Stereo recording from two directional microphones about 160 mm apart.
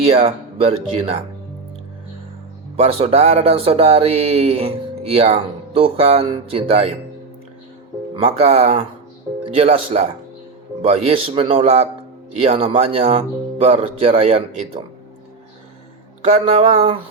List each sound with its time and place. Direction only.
0.0 s speech: 40° right (ahead or behind)
2.7 s speech: 40° right (ahead or behind)
8.1 s speech: 35° right (ahead or behind)
16.2 s speech: 40° right (ahead or behind)